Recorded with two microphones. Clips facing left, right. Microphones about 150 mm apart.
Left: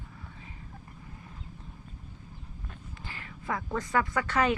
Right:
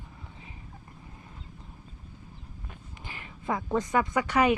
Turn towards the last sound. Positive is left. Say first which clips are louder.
# right 3 dB
turn(degrees=-15)  # may be behind; listen again after turning